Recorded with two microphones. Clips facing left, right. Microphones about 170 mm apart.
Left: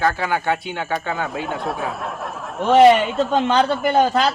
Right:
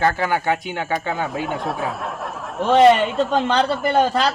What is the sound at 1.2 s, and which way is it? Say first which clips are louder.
Speech: right 1 dB; centre (ahead or behind).